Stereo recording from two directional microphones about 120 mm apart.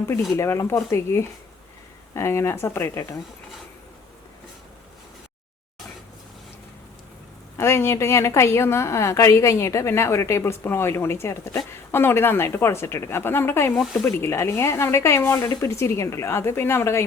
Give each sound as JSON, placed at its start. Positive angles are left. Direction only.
{"t": 0.3, "sound": "a woman's voice", "side_deg": 25}
{"t": 7.5, "sound": "a woman's voice", "side_deg": 20}